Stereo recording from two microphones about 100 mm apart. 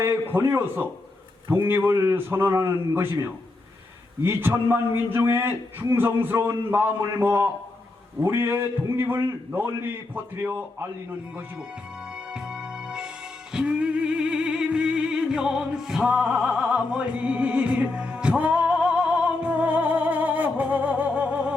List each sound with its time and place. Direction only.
0.0 s a man's voice: 20° right (ahead or behind)
4.3 s a man's voice: 20° right (ahead or behind)
12.3 s music: 5° right (ahead or behind)